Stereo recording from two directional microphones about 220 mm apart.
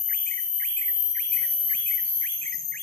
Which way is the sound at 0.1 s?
10° left (ahead or behind).